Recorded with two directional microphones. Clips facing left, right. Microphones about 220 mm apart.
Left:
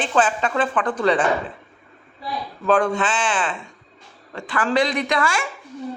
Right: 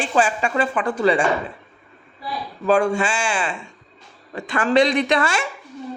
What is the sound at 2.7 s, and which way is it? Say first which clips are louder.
Speech: right 1 dB; 10° right (ahead or behind).